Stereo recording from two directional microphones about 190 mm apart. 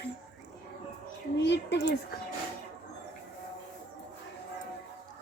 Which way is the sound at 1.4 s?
65° left (ahead or behind).